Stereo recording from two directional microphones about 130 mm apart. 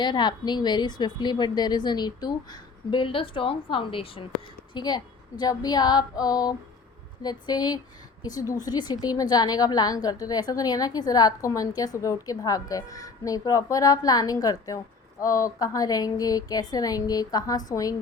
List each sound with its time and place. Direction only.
0.0 s a woman's voice: 35° left (ahead or behind)
4.7 s a woman's voice: 35° left (ahead or behind)